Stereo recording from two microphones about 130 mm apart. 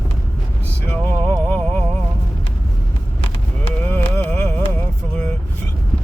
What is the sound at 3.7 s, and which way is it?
Music, 10° left (ahead or behind).